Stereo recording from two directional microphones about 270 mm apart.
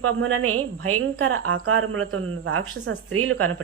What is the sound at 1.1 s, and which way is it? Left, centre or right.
A woman's voice, right.